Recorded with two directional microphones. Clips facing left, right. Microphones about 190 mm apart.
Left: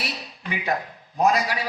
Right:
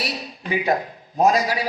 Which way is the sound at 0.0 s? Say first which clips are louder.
Right 4 dB; 40° right (ahead or behind).